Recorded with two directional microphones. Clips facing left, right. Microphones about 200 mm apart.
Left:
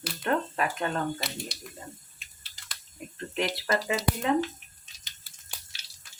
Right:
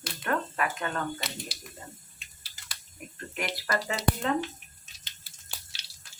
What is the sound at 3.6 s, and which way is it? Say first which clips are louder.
Speech: right 1 dB; 25° left (ahead or behind).